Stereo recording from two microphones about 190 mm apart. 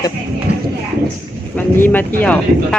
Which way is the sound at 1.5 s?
10° left (ahead or behind).